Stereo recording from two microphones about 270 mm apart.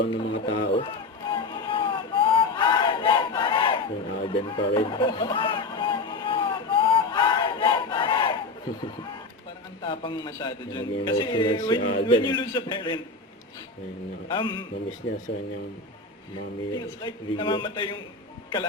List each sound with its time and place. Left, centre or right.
0.1 s run: centre
9.8 s a man's voice: centre
11.8 s speech: left
12.0 s a man's voice: centre
14.3 s a man's voice: centre
16.7 s a man's voice: centre